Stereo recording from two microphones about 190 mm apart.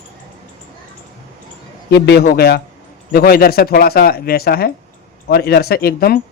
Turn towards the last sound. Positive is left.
turn(degrees=55)  # may be behind; listen again after turning